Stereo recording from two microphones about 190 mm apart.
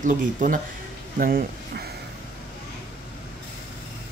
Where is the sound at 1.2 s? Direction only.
50° right (ahead or behind).